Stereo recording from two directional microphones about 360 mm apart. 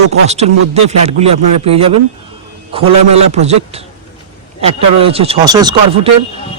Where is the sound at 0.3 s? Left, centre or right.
Centre.